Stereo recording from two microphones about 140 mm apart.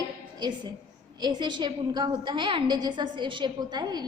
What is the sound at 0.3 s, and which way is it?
A woman's voice, 30° right (ahead or behind).